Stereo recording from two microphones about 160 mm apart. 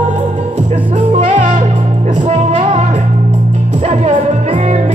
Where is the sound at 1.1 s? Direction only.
45° right (ahead or behind).